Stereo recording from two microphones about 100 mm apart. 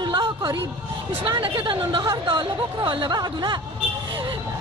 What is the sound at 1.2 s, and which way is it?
A woman's voice, 55° right (ahead or behind).